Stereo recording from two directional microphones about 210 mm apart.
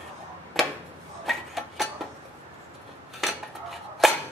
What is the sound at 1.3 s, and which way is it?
Tick-tock, centre (ahead or behind).